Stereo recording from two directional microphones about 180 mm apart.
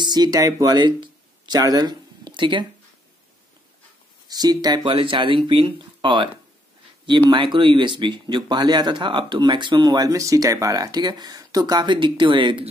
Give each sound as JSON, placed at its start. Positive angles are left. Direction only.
{"t": 0.0, "sound": "speech", "side_deg": -20}
{"t": 4.3, "sound": "speech", "side_deg": -20}